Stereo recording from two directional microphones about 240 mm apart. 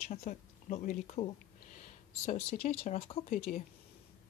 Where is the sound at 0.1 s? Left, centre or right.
Left.